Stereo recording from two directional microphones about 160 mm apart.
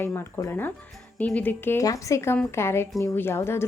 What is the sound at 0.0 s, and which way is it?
Speech, 15° left (ahead or behind).